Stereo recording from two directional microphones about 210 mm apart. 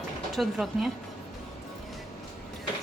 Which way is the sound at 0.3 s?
Centre (ahead or behind).